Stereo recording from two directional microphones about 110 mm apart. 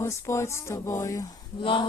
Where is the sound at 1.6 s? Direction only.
50° left (ahead or behind).